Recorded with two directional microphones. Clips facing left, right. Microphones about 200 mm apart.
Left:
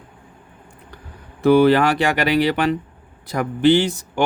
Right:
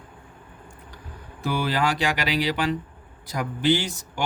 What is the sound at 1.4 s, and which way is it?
Speech, 60° left (ahead or behind).